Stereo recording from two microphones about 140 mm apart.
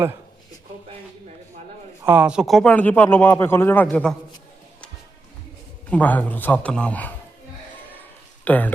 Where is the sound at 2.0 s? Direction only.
10° right (ahead or behind); by 4.1 s 10° left (ahead or behind).